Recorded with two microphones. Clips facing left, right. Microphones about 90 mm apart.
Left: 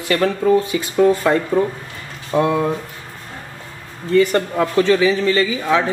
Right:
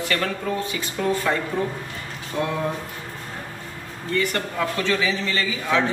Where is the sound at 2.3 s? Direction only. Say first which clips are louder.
Left 9 dB; 50° left (ahead or behind).